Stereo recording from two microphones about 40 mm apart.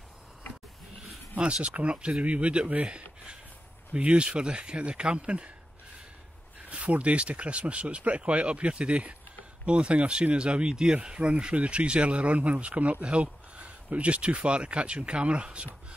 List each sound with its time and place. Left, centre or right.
1.4 s speech: right
6.7 s speech: right